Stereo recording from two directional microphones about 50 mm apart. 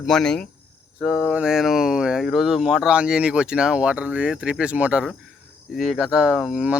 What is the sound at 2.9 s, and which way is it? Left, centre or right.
Speech, centre.